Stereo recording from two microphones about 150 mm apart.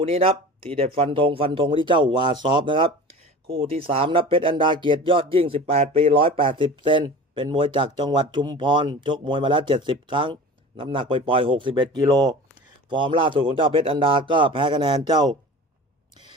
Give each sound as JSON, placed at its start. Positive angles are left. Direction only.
{"t": 0.0, "sound": "speech", "side_deg": -40}